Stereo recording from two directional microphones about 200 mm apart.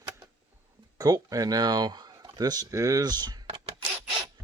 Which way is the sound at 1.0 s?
20° right (ahead or behind).